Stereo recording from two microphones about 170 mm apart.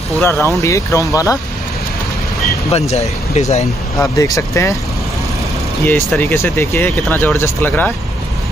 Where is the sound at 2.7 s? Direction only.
40° left (ahead or behind).